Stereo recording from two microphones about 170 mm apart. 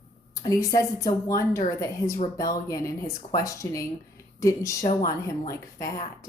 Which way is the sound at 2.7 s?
20° left (ahead or behind).